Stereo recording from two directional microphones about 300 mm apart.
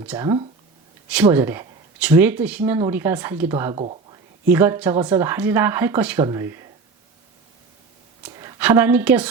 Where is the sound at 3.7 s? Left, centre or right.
Centre.